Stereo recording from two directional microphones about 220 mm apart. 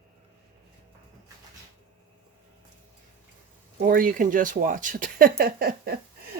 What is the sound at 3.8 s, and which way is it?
Speech, 40° right (ahead or behind).